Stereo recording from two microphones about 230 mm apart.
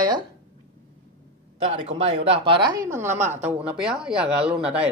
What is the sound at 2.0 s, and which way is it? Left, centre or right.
Speech, right.